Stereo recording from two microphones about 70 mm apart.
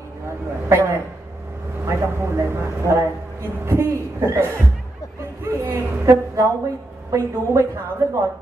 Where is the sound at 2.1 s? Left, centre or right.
Right.